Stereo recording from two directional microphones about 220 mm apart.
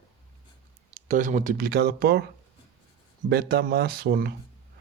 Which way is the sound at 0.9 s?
35° right (ahead or behind).